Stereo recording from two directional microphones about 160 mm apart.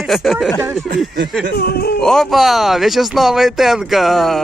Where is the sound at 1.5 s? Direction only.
80° left.